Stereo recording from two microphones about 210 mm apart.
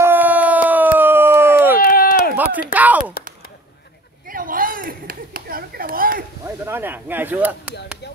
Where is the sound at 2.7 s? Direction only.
10° right (ahead or behind).